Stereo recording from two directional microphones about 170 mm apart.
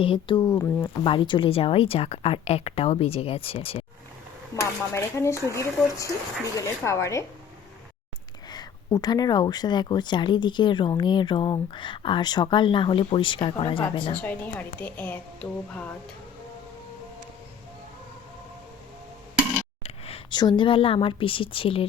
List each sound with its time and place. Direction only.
0.0 s speech: 30° left (ahead or behind)
4.5 s a woman's voice: 20° left (ahead or behind)
8.4 s speech: 25° left (ahead or behind)
14.2 s a woman's voice: 10° left (ahead or behind)
19.8 s speech: 35° left (ahead or behind)